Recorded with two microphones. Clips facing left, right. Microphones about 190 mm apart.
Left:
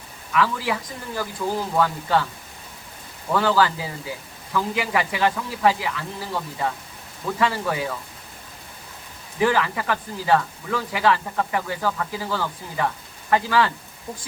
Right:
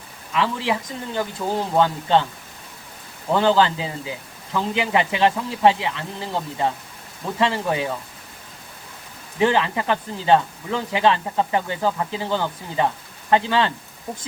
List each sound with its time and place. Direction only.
0.3 s speech: 25° right (ahead or behind)
3.3 s speech: 25° right (ahead or behind)
9.4 s speech: 25° right (ahead or behind)